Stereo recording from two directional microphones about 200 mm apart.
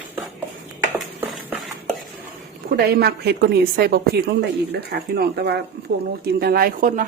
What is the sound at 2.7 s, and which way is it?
A woman's voice, 50° right (ahead or behind).